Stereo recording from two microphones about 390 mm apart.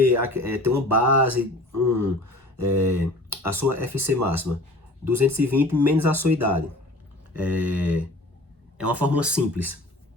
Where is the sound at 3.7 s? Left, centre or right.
Right.